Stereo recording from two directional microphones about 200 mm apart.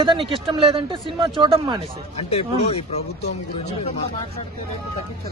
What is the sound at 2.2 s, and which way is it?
Speech, 30° left (ahead or behind).